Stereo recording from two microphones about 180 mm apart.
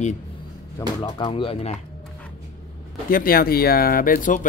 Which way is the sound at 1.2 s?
30° left (ahead or behind).